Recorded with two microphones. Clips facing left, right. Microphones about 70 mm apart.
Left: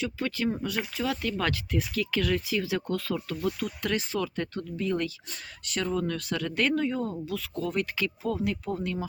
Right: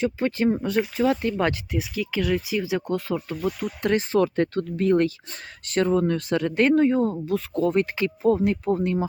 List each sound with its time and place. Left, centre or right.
0.0 s speech: right
1.7 s speech: centre; by 9.0 s right